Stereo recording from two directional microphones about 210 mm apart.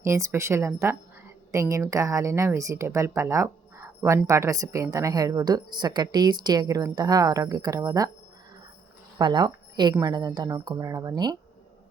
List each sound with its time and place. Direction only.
0.0 s a woman's voice: 15° right (ahead or behind)
9.1 s a woman's voice: 20° right (ahead or behind)